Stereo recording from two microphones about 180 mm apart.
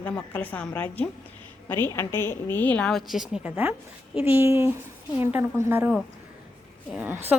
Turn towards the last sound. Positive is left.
turn(degrees=-10)  # may be behind; listen again after turning